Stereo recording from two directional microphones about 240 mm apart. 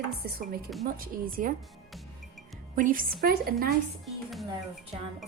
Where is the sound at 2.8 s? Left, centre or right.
Right.